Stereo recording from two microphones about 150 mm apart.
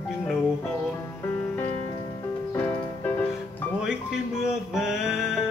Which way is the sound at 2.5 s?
10° left (ahead or behind).